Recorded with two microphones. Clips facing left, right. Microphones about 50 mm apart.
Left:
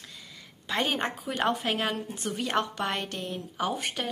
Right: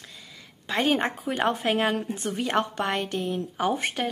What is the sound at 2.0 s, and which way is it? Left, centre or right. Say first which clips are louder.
Speech: right 6 dB; right.